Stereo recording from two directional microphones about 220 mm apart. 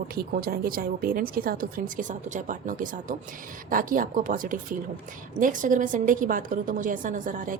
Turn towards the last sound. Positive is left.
turn(degrees=-35)  # may be behind; listen again after turning